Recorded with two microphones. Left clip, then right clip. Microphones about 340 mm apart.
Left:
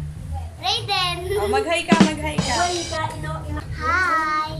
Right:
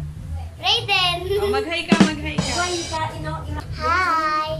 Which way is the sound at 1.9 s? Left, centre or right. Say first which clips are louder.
Right 2 dB; centre.